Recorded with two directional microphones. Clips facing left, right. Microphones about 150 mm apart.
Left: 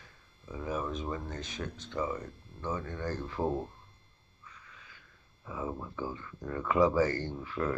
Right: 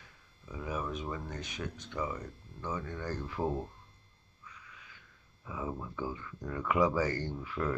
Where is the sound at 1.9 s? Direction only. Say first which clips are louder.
Left 4 dB; 25° left (ahead or behind).